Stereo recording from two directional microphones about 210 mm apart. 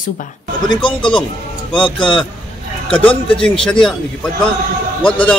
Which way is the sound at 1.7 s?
20° left (ahead or behind).